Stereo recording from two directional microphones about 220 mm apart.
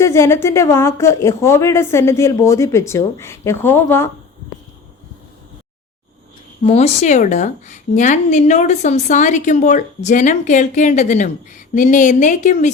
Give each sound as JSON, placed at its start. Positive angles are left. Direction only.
{"t": 0.0, "sound": "speech", "side_deg": 10}
{"t": 6.7, "sound": "a woman's voice", "side_deg": 30}